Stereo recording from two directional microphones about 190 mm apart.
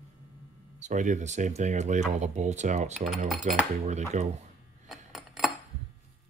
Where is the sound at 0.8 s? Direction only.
40° right (ahead or behind).